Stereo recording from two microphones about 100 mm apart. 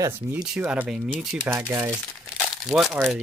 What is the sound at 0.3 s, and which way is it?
Speech, 15° right (ahead or behind).